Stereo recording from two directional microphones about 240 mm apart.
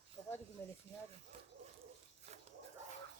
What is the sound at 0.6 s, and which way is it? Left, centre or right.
Speech, centre.